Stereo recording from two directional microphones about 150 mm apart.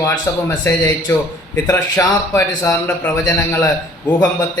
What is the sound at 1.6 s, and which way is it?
A man's voice, 20° left (ahead or behind).